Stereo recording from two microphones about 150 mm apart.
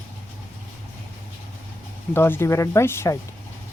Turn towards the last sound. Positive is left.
turn(degrees=20)  # may be behind; listen again after turning